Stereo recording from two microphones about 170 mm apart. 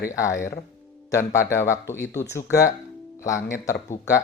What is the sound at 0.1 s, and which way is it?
Speech, 15° left (ahead or behind).